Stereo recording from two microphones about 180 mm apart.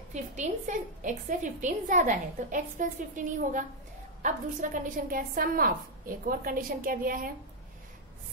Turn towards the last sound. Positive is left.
turn(degrees=-50)  # may be behind; listen again after turning